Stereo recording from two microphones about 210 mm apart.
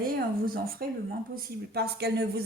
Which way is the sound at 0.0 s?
45° right (ahead or behind).